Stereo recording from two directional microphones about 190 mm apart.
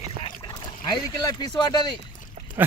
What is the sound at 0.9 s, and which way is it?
Speech, 20° left (ahead or behind).